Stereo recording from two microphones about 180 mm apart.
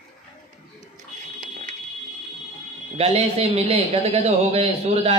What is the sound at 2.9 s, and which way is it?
A man's voice, 35° right (ahead or behind).